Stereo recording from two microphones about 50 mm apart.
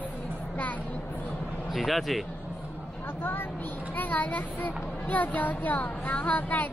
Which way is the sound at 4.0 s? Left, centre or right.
Left.